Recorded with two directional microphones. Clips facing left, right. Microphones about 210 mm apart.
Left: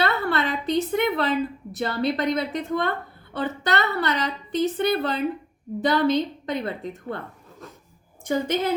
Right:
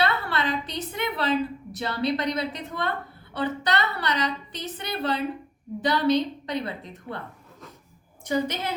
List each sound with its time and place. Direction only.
0.0 s a sound: 50° left (ahead or behind)
1.8 s a woman's voice: 50° left (ahead or behind)
8.2 s a woman's voice: 50° left (ahead or behind)